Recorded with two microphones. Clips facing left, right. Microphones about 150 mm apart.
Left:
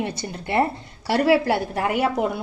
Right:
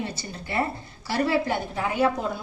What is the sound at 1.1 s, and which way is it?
A woman's voice, 80° left.